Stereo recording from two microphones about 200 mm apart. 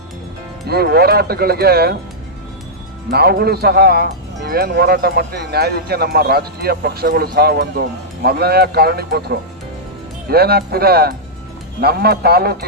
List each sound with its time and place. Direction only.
0.7 s a man's voice: 50° right (ahead or behind)
3.1 s a man's voice: 50° right (ahead or behind)